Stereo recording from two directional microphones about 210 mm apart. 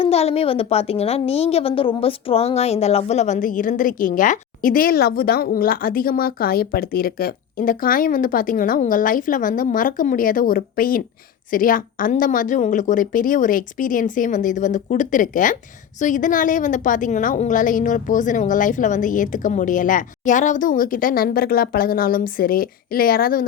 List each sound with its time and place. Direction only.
0.0 s a woman's voice: 30° left (ahead or behind)